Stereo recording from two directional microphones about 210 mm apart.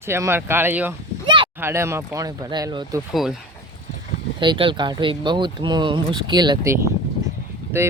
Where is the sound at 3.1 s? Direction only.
Centre (ahead or behind).